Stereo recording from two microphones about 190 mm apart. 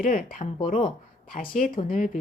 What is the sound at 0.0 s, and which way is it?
Speech, 45° left (ahead or behind).